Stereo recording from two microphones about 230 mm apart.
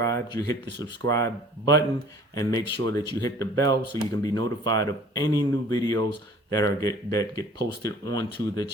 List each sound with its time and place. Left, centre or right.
0.0 s speech: centre